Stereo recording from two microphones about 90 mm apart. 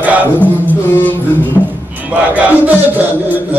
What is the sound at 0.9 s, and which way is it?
Music, 20° left (ahead or behind).